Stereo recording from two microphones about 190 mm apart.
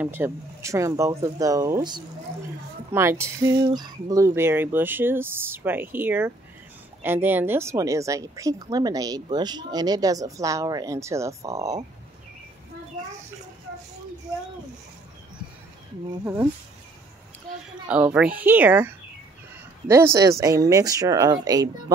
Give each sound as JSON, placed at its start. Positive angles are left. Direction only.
{"t": 0.0, "sound": "speech", "side_deg": -10}
{"t": 17.8, "sound": "speech", "side_deg": -5}